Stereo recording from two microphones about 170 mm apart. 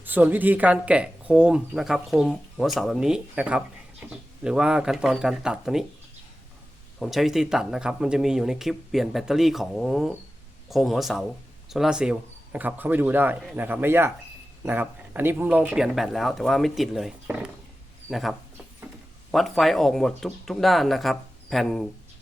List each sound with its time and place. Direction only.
0.0 s speech: 10° right (ahead or behind)
7.0 s speech: centre (ahead or behind)